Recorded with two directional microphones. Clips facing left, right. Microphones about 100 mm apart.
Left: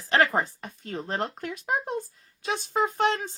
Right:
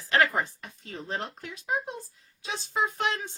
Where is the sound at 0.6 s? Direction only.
50° left (ahead or behind).